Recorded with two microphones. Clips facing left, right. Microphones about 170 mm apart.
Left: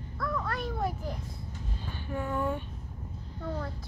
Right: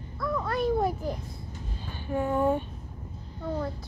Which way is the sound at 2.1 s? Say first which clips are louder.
Right 6 dB; 25° right (ahead or behind).